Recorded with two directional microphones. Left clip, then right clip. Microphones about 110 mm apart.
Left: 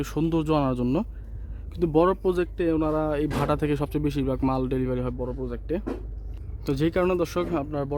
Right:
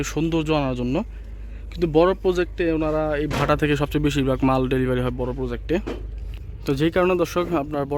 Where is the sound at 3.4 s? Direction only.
15° left (ahead or behind); by 5.2 s centre (ahead or behind).